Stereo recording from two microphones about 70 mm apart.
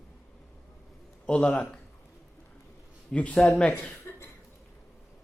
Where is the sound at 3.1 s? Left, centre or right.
Centre.